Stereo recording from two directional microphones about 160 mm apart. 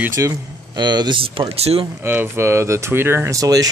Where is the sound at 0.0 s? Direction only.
20° right (ahead or behind); by 1.9 s 40° right (ahead or behind).